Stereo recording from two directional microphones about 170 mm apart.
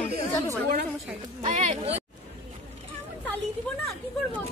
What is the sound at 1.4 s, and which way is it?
Speech, 40° right (ahead or behind).